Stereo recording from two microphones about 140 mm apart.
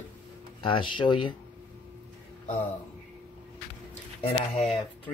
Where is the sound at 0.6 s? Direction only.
40° left (ahead or behind).